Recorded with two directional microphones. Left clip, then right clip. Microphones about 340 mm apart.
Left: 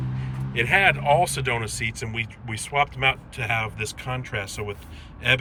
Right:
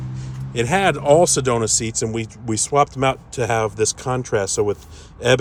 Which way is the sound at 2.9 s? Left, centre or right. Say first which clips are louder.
Right 3 dB; right.